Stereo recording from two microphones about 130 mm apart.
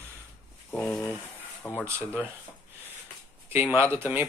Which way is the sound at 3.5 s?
15° right (ahead or behind).